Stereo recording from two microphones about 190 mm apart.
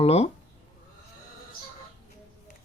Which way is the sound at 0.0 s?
35° left (ahead or behind).